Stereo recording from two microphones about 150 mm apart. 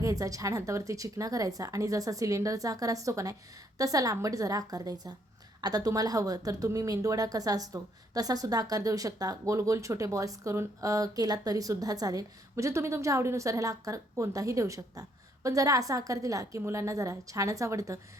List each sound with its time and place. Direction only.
0.0 s a woman's voice: 20° right (ahead or behind)